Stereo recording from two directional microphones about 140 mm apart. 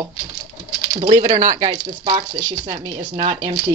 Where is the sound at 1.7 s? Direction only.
30° right (ahead or behind).